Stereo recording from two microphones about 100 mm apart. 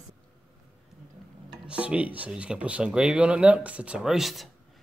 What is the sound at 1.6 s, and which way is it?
Speech, 10° right (ahead or behind).